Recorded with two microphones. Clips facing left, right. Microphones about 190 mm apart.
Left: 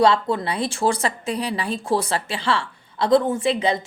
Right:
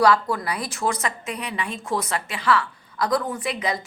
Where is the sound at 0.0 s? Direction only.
25° left (ahead or behind).